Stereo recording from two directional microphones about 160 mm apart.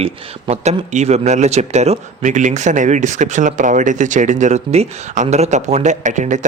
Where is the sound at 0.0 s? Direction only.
40° right (ahead or behind).